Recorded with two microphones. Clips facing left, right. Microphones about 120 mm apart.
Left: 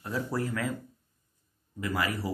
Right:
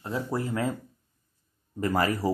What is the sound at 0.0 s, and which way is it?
Speech, 20° right (ahead or behind).